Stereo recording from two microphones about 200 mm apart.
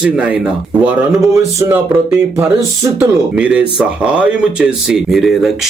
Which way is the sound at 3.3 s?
5° right (ahead or behind).